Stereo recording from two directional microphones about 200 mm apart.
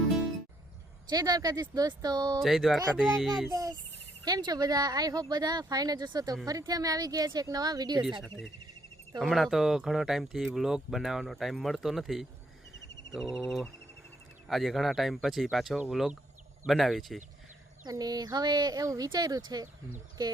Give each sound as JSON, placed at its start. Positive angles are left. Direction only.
{"t": 1.1, "sound": "speech", "side_deg": -20}
{"t": 2.4, "sound": "speech", "side_deg": 0}
{"t": 3.5, "sound": "speech", "side_deg": -20}
{"t": 9.2, "sound": "speech", "side_deg": 0}
{"t": 17.8, "sound": "speech", "side_deg": -20}